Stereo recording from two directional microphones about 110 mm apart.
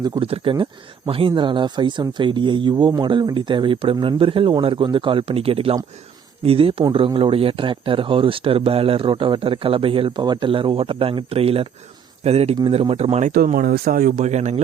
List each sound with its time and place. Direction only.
0.2 s speech: 60° right (ahead or behind)
1.4 s speech: 45° right (ahead or behind); by 13.2 s 70° right (ahead or behind)
14.2 s a man's voice: 90° right